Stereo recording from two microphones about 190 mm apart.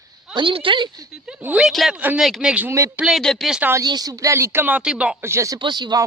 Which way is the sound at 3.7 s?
20° right (ahead or behind).